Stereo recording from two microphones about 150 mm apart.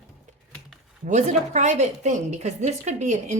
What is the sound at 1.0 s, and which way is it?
A woman's voice, 55° right (ahead or behind).